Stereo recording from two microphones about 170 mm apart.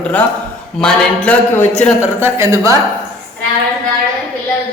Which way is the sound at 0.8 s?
5° left (ahead or behind).